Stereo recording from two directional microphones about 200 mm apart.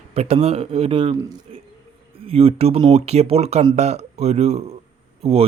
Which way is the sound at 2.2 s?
30° right (ahead or behind).